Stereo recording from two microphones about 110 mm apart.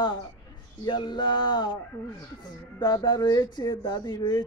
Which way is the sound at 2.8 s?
35° left (ahead or behind).